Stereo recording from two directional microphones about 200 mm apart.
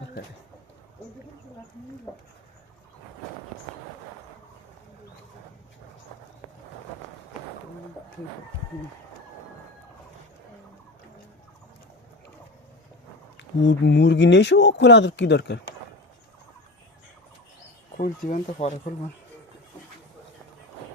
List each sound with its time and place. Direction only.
13.3 s speech: 65° left (ahead or behind)
17.9 s speech: 40° left (ahead or behind)